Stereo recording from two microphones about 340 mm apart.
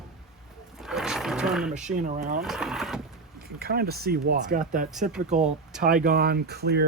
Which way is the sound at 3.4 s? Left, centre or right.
Right.